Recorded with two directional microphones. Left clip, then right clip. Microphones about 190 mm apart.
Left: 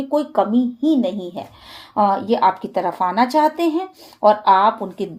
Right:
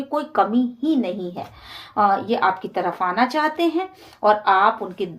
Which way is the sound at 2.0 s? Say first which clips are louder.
Left 2 dB; 45° left (ahead or behind).